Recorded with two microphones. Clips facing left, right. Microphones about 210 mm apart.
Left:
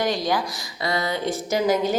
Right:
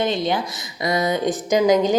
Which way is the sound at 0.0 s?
25° right (ahead or behind).